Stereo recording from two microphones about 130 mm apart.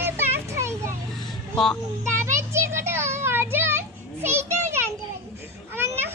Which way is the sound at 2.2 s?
20° right (ahead or behind).